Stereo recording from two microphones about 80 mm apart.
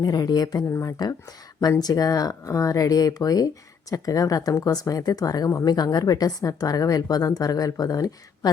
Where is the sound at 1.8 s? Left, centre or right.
Left.